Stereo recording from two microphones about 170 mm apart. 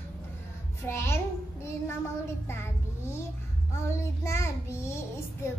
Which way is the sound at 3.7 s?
15° left (ahead or behind).